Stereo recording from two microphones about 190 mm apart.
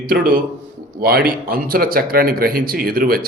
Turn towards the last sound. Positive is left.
turn(degrees=-50)  # may be behind; listen again after turning